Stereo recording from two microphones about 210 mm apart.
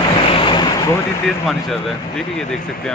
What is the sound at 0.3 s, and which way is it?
Waves, 25° left (ahead or behind).